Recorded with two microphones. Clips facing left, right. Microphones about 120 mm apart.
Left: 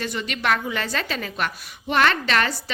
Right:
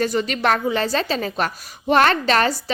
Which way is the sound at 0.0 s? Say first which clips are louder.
Right 6 dB; 40° right (ahead or behind).